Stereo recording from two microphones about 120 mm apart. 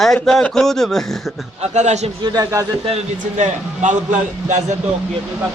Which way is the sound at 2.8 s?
75° right (ahead or behind).